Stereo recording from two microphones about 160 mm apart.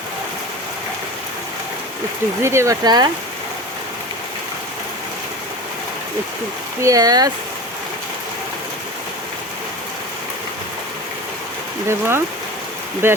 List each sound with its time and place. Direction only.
2.4 s speech: 15° right (ahead or behind)
6.8 s speech: 20° right (ahead or behind)
11.9 s speech: 15° right (ahead or behind)